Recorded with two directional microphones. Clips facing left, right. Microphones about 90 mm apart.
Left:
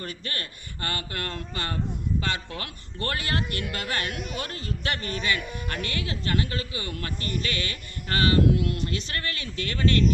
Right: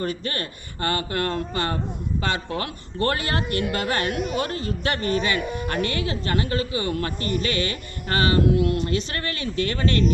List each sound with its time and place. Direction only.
0.0 s a man's voice: 30° right (ahead or behind)